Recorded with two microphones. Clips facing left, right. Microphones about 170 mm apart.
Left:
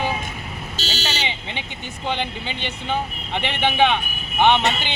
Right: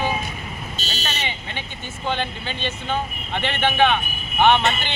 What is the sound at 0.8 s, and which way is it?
Fire alarm, 80° left.